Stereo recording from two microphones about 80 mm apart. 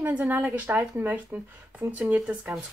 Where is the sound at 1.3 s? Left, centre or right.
Right.